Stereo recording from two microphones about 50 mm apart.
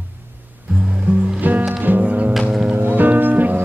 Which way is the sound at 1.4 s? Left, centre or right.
Right.